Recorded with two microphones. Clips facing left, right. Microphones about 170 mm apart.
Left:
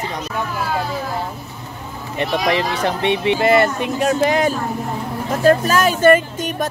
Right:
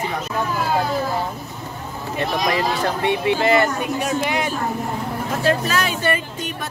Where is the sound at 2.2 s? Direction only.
20° left (ahead or behind).